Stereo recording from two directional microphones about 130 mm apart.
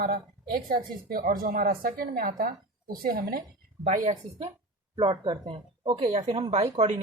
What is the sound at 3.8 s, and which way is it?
Speech, 80° right.